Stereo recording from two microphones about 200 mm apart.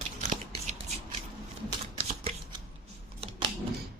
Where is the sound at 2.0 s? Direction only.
25° right (ahead or behind).